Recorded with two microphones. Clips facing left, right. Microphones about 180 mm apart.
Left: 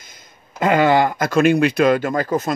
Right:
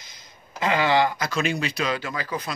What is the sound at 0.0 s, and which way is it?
Speech, 50° left (ahead or behind).